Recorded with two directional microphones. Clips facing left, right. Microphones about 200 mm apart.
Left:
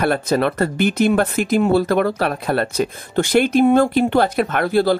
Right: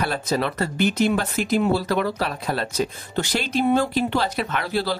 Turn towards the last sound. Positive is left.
turn(degrees=50)  # may be behind; listen again after turning